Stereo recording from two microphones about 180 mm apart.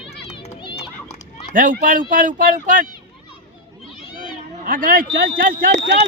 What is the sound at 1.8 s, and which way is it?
A man's voice, 50° right (ahead or behind).